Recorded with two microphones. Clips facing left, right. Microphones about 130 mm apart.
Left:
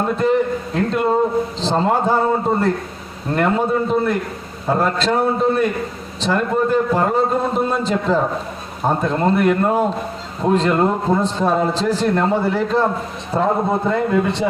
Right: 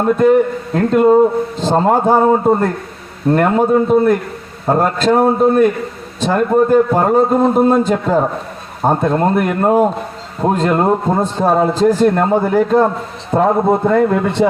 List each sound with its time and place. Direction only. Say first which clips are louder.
0.2 s a man's voice: right 6 dB; 50° right (ahead or behind)